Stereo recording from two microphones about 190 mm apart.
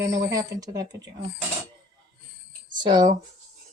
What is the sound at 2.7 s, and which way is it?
Speech, 20° right (ahead or behind).